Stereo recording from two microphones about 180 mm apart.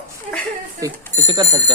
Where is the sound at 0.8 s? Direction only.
20° right (ahead or behind).